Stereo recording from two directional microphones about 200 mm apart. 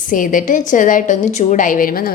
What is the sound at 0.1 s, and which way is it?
A woman's voice, 40° left (ahead or behind).